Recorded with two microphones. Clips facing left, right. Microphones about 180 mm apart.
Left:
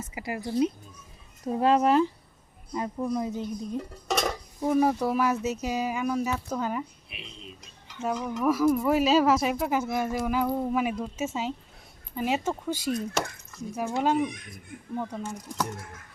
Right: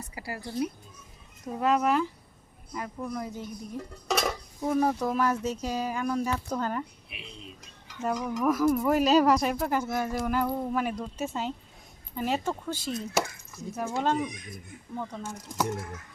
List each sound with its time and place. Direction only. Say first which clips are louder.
0.1 s speech: left 6 dB; 20° left (ahead or behind)
4.1 s speech: left 1 dB; 5° left (ahead or behind)
8.1 s speech: left 1 dB; 10° right (ahead or behind); by 12.9 s 10° left (ahead or behind)
14.0 s speech: left 3 dB; 10° left (ahead or behind)
14.3 s speech: left 1 dB; 60° left (ahead or behind)
14.9 s speech: left 3 dB; 10° left (ahead or behind)
15.2 s speech: even; 5° right (ahead or behind)